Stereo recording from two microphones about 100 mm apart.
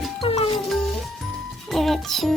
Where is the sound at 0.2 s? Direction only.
75° left (ahead or behind).